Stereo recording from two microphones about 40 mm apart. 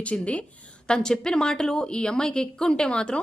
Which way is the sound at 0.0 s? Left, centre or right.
Left.